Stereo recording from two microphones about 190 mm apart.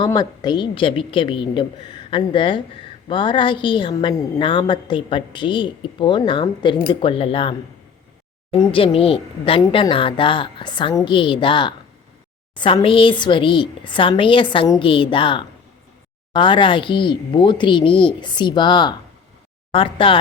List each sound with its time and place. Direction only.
0.0 s a woman's voice: 20° left (ahead or behind)
8.5 s a woman's voice: 25° left (ahead or behind)